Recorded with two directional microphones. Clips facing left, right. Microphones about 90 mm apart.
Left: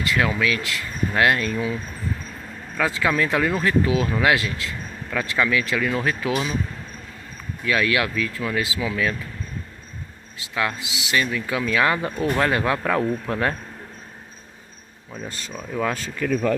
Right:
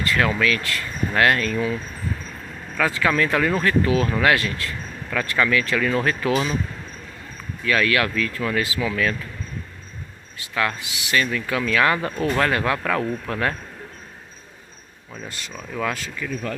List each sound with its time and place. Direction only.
0.0 s speech: 10° left (ahead or behind)
2.8 s speech: 15° left (ahead or behind)
7.6 s speech: 15° left (ahead or behind)
10.5 s speech: 15° left (ahead or behind)
15.2 s speech: 35° left (ahead or behind)